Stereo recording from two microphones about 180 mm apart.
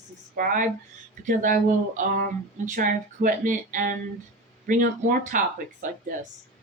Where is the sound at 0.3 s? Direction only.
50° right (ahead or behind).